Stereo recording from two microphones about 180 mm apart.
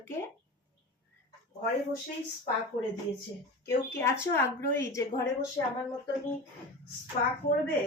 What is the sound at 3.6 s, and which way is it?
A woman's voice, 15° left (ahead or behind).